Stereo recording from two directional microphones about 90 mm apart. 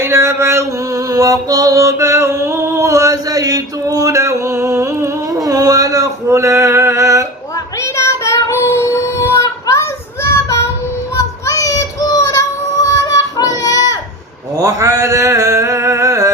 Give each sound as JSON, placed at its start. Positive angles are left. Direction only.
{"t": 0.0, "sound": "music", "side_deg": -30}
{"t": 7.8, "sound": "child singing", "side_deg": 30}
{"t": 11.2, "sound": "child singing", "side_deg": 35}
{"t": 14.5, "sound": "a sound", "side_deg": -35}